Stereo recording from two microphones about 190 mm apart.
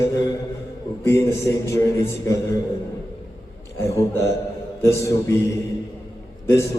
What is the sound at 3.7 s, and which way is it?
A man's voice, 15° left (ahead or behind).